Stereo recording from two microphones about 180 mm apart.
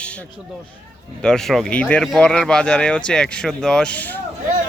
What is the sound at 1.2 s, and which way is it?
Speech, 5° left (ahead or behind).